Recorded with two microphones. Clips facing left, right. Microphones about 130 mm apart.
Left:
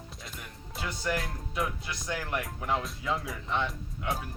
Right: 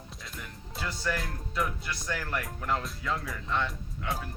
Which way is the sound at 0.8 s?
20° left (ahead or behind).